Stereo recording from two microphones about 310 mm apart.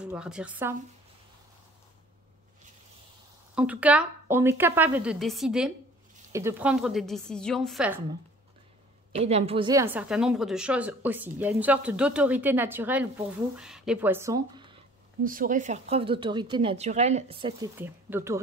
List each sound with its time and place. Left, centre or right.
0.0 s a woman's voice: centre
3.5 s a woman's voice: centre
9.1 s a woman's voice: centre
15.2 s a woman's voice: right; by 18.4 s centre